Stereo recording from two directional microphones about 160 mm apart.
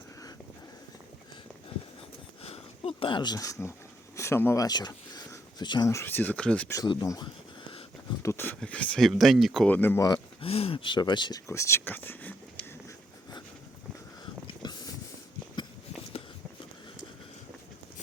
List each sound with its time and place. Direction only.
2.4 s speech: 40° left (ahead or behind); by 6.7 s 5° left (ahead or behind)
6.7 s speech: 25° left (ahead or behind)
10.1 s speech: 35° left (ahead or behind); by 12.3 s 10° left (ahead or behind)
14.4 s a sound: 25° left (ahead or behind)